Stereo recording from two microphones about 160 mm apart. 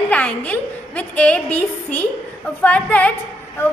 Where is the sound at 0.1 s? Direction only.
10° left (ahead or behind).